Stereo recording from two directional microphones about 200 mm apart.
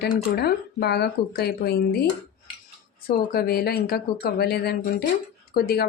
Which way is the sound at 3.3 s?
50° left (ahead or behind).